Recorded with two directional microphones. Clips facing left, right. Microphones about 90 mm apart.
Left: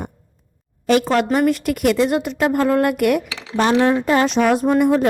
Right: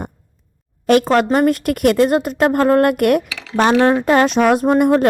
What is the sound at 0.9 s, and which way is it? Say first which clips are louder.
A woman's voice: right 3 dB; 50° right (ahead or behind).